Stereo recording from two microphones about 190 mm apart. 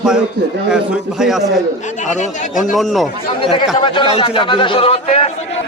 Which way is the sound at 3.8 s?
25° left (ahead or behind).